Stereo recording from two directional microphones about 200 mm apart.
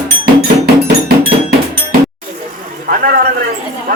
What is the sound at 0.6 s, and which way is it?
Cowbell, 50° right (ahead or behind).